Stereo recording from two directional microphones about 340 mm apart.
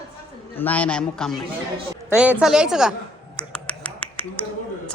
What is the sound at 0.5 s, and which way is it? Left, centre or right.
A man's voice, centre.